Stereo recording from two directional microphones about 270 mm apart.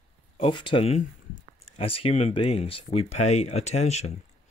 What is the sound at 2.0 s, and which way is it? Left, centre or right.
Speech, left.